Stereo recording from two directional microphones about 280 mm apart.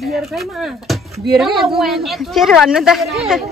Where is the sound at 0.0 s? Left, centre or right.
Centre.